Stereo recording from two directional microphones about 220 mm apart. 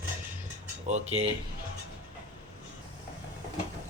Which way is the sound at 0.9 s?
30° right (ahead or behind).